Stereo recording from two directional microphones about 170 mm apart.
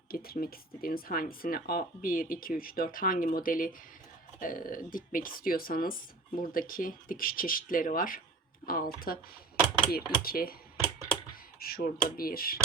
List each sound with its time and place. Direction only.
0.1 s speech: 60° left (ahead or behind)
11.6 s speech: 60° left (ahead or behind)